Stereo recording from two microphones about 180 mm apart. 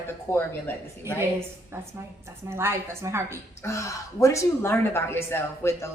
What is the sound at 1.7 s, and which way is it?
A woman's voice, 15° right (ahead or behind).